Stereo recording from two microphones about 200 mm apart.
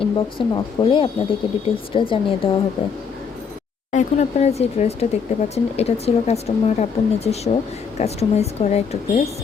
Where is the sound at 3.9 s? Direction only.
35° left (ahead or behind).